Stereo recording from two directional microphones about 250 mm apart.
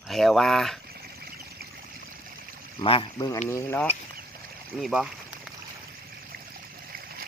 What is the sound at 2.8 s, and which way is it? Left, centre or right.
Speech, left.